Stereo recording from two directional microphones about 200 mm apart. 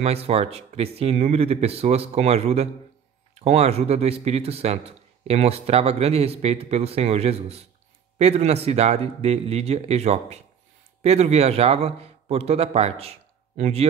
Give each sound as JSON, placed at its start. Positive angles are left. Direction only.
{"t": 0.0, "sound": "speech", "side_deg": -30}